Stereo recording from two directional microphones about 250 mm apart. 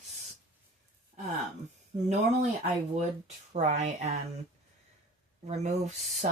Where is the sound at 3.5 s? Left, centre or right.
Right.